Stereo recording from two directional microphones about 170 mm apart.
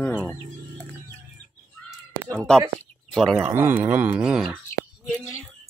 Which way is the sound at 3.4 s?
15° right (ahead or behind).